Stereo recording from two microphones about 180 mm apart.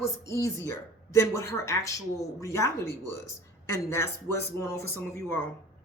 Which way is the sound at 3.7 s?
15° left (ahead or behind).